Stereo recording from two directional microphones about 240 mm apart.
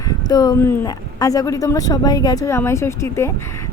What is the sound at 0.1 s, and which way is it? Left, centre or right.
Speech, centre.